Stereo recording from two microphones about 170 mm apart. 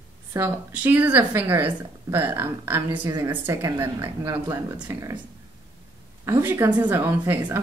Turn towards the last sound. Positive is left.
turn(degrees=-10)  # may be behind; listen again after turning